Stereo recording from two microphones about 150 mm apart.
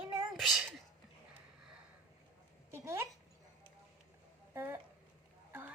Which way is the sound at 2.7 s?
20° right (ahead or behind).